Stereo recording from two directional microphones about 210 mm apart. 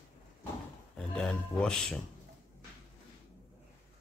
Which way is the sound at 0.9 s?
5° left (ahead or behind).